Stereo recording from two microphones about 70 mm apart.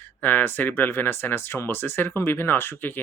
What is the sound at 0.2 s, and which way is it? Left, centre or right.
Speech, left.